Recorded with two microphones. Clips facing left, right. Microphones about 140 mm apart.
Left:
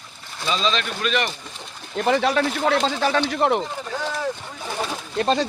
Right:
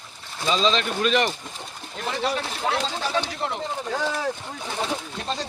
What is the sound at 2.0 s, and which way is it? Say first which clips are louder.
Speech: left 7 dB; 70° left (ahead or behind).